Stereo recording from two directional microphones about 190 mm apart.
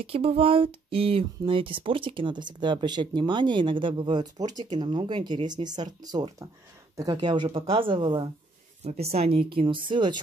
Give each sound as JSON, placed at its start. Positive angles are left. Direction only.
{"t": 0.0, "sound": "speech", "side_deg": -30}